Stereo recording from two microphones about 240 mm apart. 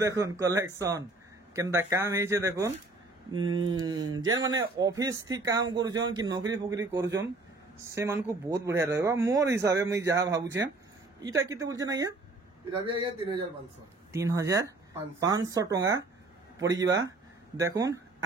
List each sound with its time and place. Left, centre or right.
0.0 s a man's voice: centre